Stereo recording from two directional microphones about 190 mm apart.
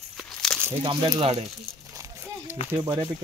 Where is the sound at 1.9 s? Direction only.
15° right (ahead or behind).